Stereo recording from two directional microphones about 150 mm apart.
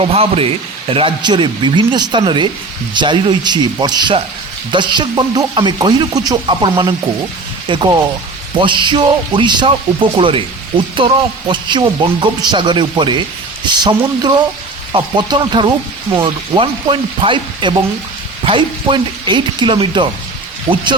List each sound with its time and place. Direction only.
0.0 s speech: 40° right (ahead or behind)